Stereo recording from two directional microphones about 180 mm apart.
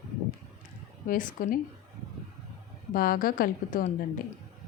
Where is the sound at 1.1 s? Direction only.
45° left (ahead or behind).